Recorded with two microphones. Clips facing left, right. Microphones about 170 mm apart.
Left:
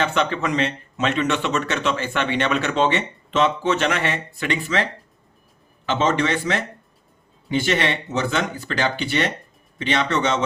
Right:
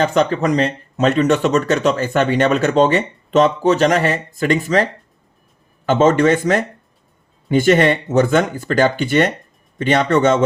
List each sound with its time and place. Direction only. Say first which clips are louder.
0.0 s speech: right 6 dB; 40° right (ahead or behind)